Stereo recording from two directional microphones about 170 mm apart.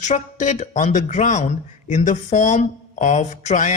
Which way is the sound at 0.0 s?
45° left (ahead or behind).